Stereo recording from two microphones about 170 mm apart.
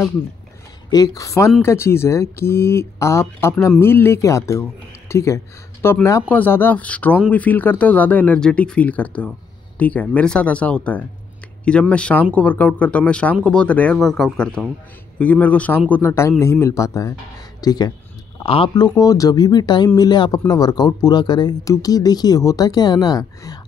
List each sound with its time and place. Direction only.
0.8 s speech: 20° left (ahead or behind)